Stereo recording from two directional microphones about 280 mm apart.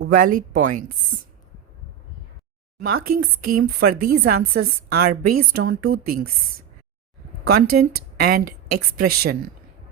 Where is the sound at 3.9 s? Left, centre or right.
Right.